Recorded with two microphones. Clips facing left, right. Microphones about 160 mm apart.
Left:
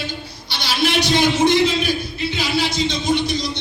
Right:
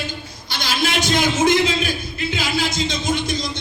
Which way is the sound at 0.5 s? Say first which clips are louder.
Left 2 dB; 45° right (ahead or behind).